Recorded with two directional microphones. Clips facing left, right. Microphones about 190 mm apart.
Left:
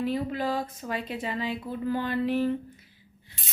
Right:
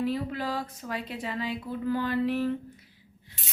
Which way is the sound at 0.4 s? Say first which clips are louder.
Left 3 dB; 25° left (ahead or behind).